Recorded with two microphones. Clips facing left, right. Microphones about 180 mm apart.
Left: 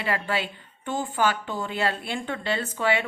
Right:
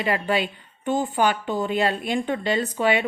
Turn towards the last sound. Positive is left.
turn(degrees=-15)  # may be behind; listen again after turning